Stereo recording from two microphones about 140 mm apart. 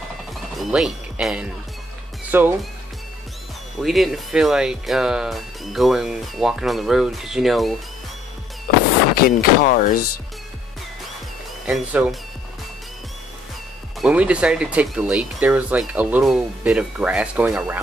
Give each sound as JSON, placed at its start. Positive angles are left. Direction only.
{"t": 0.3, "sound": "music", "side_deg": 0}
{"t": 2.3, "sound": "speech", "side_deg": -15}
{"t": 3.8, "sound": "speech", "side_deg": 0}
{"t": 9.1, "sound": "speech", "side_deg": 90}
{"t": 11.6, "sound": "speech", "side_deg": -10}
{"t": 14.0, "sound": "speech", "side_deg": -10}